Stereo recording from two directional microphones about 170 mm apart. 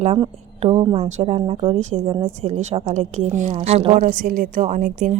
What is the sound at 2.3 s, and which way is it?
A woman's voice, 40° right (ahead or behind).